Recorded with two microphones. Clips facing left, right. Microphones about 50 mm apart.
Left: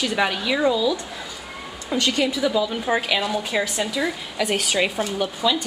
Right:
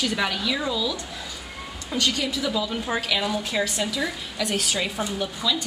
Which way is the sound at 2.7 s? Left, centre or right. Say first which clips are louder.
Left 4 dB; centre.